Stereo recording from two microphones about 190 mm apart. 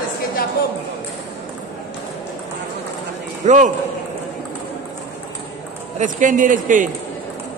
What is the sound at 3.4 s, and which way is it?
Speech, 40° right (ahead or behind).